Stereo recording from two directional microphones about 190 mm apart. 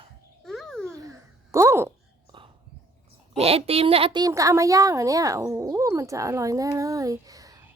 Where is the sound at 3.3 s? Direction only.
30° right (ahead or behind).